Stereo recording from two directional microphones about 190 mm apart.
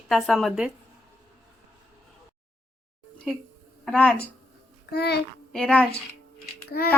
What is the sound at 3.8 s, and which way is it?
Speech, 5° left (ahead or behind).